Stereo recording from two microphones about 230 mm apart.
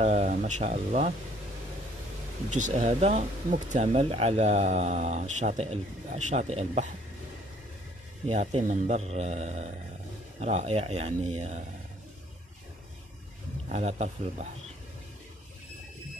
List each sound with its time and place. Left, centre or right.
0.0 s speech: right
2.5 s speech: right
8.3 s speech: right
13.7 s speech: right